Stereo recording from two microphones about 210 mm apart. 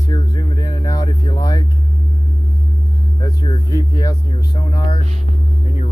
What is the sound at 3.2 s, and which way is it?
Speech, 20° left (ahead or behind).